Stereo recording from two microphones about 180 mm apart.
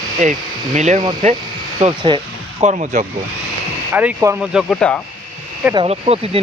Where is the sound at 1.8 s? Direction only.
30° right (ahead or behind).